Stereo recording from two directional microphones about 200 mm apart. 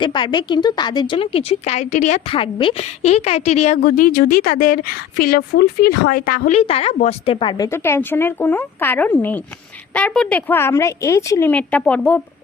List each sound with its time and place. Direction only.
0.0 s a woman's voice: 25° left (ahead or behind)
7.7 s a woman's voice: 10° left (ahead or behind)